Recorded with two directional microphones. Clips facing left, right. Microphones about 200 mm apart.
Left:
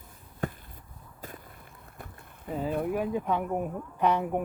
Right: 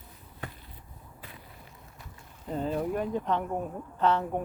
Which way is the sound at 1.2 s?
45° left (ahead or behind).